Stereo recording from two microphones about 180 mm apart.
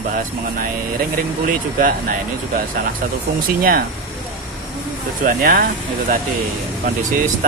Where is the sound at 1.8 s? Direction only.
50° right (ahead or behind).